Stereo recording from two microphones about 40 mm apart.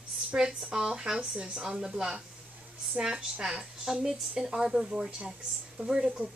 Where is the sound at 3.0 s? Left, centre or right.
Centre.